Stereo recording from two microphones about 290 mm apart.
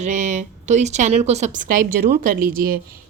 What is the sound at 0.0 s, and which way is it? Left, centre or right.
A woman's voice, right.